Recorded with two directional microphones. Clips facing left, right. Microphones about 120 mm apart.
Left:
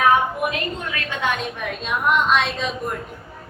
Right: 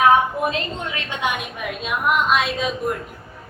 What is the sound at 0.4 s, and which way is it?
A woman's voice, 25° right (ahead or behind).